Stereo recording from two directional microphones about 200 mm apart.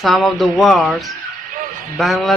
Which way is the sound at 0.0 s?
Centre (ahead or behind).